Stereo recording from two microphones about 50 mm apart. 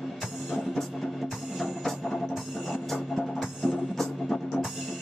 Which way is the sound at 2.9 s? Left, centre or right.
Centre.